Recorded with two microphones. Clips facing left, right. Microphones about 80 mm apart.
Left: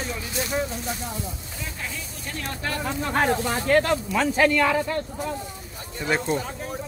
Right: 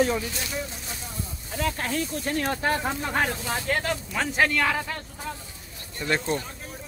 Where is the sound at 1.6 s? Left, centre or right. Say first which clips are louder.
Right 9 dB; right.